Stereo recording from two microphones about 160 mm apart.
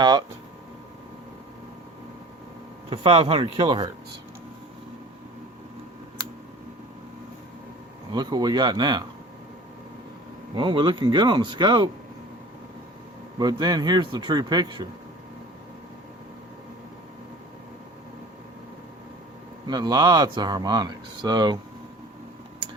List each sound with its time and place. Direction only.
0.0 s speech: 25° right (ahead or behind)
2.9 s speech: 35° right (ahead or behind)
8.1 s speech: 25° right (ahead or behind)
10.5 s speech: 30° right (ahead or behind)
13.4 s speech: 25° right (ahead or behind)
19.6 s speech: 25° right (ahead or behind)